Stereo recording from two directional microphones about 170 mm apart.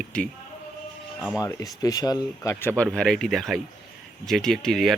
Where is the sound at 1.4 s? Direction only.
20° left (ahead or behind).